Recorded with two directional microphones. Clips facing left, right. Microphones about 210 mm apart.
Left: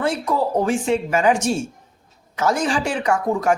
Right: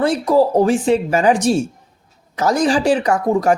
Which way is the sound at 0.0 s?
35° right (ahead or behind).